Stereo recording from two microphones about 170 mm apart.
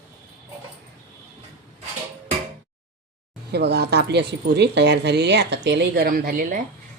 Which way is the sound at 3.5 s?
80° right.